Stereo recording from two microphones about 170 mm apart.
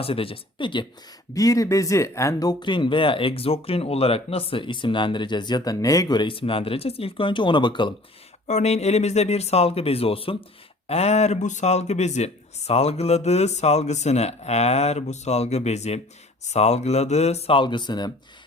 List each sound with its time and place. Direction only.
0.0 s speech: 35° left (ahead or behind)
8.4 s speech: 40° left (ahead or behind); by 18.1 s 25° left (ahead or behind)